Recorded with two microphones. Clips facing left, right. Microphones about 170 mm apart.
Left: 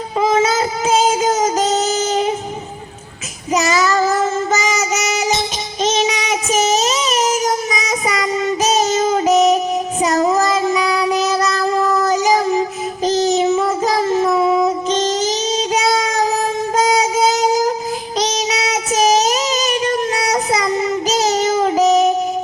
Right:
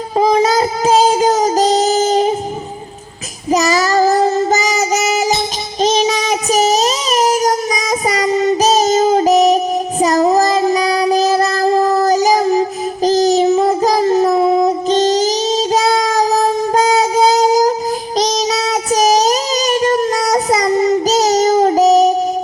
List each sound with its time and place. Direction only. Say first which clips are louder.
0.2 s child singing: right 3 dB; 35° right (ahead or behind)
3.5 s child singing: right 3 dB; 35° right (ahead or behind)